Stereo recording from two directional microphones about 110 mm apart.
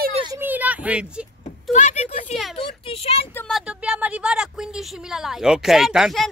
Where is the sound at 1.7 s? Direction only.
90° left.